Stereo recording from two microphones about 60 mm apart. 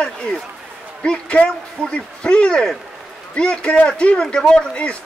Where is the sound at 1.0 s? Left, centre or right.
Centre.